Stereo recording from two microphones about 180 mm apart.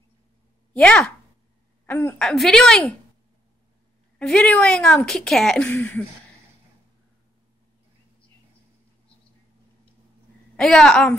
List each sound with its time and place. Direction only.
0.7 s speech: 5° left (ahead or behind)
4.2 s speech: 5° left (ahead or behind)
10.5 s speech: 5° left (ahead or behind)